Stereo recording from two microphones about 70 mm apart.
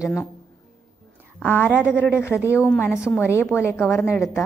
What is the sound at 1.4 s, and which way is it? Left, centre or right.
A woman's voice, left.